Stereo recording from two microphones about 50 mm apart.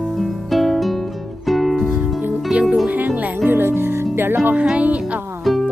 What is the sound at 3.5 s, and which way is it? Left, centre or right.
Music, right.